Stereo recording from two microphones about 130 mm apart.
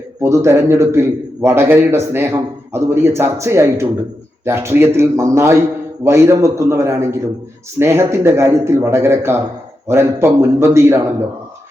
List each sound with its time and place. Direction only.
0.2 s a man's voice: 20° right (ahead or behind)